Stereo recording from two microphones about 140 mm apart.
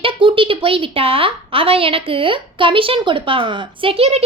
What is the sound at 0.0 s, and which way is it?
A woman's voice, 35° right (ahead or behind).